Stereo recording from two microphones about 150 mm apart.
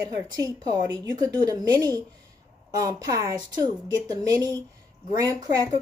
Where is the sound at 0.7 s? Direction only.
25° right (ahead or behind).